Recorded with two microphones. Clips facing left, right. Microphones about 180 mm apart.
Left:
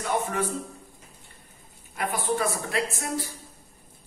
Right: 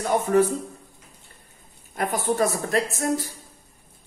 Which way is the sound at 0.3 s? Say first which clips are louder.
Right 10 dB; 40° right (ahead or behind).